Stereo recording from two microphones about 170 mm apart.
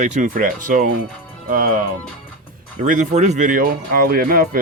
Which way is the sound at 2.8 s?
50° right (ahead or behind).